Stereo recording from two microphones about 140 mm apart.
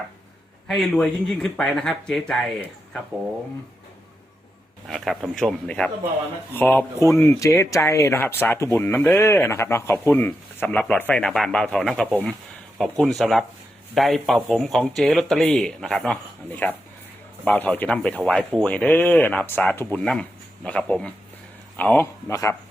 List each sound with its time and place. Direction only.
0.7 s speech: 5° left (ahead or behind)
4.9 s speech: centre (ahead or behind)